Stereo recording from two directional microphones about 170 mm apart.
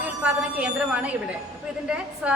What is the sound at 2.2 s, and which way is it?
Speech, 5° right (ahead or behind).